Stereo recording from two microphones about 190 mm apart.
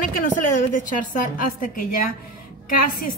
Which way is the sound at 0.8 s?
45° left (ahead or behind).